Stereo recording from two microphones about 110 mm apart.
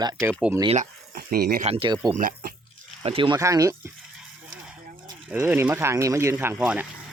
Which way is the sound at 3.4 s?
30° right (ahead or behind).